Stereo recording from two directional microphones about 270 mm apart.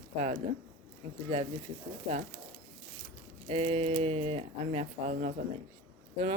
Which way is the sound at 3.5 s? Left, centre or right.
Right.